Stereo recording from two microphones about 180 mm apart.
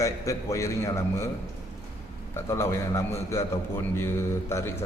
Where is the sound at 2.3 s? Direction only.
15° left (ahead or behind).